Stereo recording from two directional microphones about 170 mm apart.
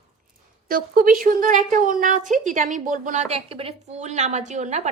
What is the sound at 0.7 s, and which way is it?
A woman's voice, 55° right (ahead or behind).